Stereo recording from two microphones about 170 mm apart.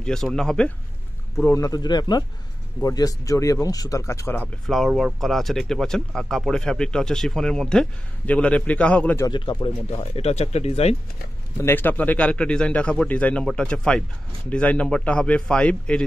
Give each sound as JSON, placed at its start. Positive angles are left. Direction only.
{"t": 0.0, "sound": "speech", "side_deg": 5}
{"t": 1.4, "sound": "speech", "side_deg": 20}
{"t": 4.6, "sound": "speech", "side_deg": 0}
{"t": 9.2, "sound": "speech", "side_deg": 25}
{"t": 11.6, "sound": "a man's voice", "side_deg": 10}